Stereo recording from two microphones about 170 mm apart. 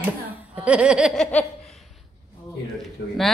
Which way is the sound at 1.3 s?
10° left (ahead or behind).